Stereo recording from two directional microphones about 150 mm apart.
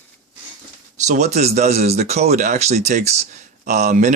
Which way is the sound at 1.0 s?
50° right (ahead or behind).